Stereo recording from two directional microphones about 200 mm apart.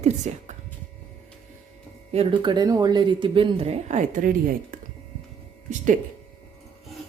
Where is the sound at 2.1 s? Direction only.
25° right (ahead or behind); by 4.8 s 45° right (ahead or behind).